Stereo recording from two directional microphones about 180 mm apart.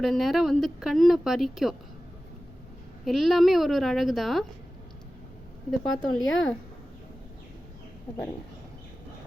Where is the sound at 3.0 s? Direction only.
Centre (ahead or behind).